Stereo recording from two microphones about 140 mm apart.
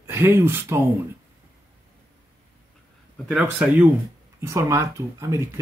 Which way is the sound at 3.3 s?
5° right (ahead or behind).